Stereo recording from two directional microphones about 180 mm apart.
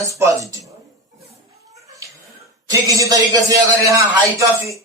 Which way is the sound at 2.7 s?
20° right (ahead or behind).